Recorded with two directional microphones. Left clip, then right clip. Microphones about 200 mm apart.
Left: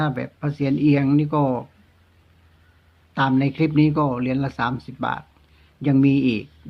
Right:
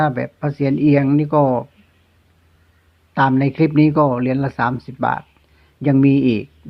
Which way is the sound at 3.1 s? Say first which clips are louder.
Right 5 dB; 25° right (ahead or behind).